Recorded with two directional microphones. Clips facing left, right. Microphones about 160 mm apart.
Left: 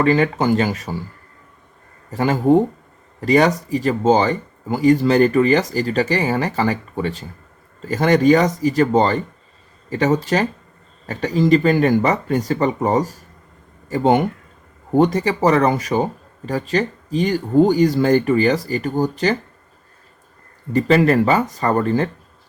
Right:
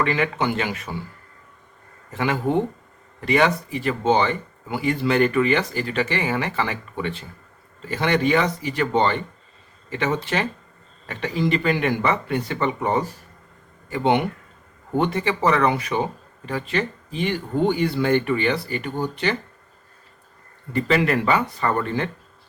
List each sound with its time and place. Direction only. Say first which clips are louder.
0.0 s speech: left 6 dB; 35° left (ahead or behind)
2.0 s speech: left 7 dB; 40° left (ahead or behind)
20.7 s speech: left 6 dB; 40° left (ahead or behind)